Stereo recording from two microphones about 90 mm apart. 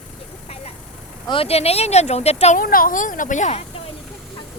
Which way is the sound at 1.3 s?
90° left.